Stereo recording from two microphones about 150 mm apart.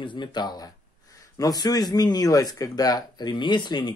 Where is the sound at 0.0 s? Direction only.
30° left (ahead or behind).